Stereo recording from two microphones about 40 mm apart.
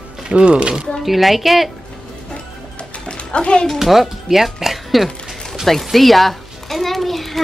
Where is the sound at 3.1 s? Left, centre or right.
Left.